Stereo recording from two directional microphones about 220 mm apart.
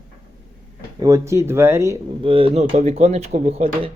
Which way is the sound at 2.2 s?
25° right (ahead or behind).